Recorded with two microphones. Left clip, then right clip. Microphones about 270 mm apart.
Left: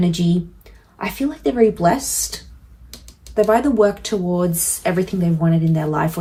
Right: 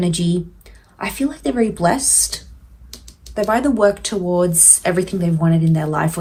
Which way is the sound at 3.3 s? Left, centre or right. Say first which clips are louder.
Left 2 dB; right.